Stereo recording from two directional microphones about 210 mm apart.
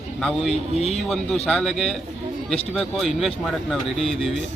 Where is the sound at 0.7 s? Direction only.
30° left (ahead or behind).